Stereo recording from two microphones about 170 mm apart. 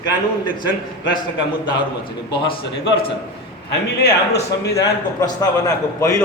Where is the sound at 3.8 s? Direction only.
80° left.